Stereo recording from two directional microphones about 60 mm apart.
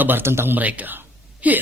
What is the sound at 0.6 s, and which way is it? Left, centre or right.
Speech, right.